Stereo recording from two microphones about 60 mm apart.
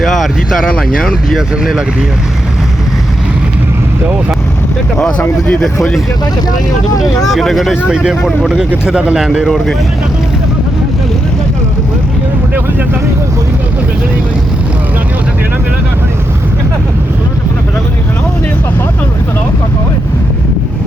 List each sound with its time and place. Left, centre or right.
0.0 s speech: centre
5.5 s speech: centre
7.2 s speech: centre
7.9 s speech: centre
8.9 s speech: centre
9.1 s speech: centre